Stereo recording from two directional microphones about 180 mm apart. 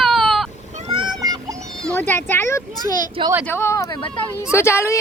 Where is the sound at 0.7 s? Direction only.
35° right (ahead or behind); by 1.6 s 20° right (ahead or behind).